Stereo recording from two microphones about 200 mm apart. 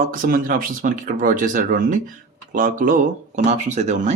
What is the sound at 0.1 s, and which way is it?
A man's voice, 45° right (ahead or behind).